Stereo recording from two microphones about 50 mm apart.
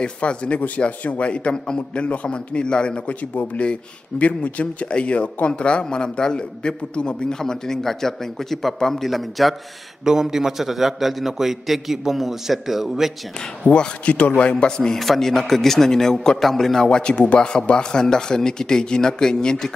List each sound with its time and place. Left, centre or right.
0.0 s a man's voice: left; by 13.1 s centre
13.7 s a man's voice: left
14.8 s speech: centre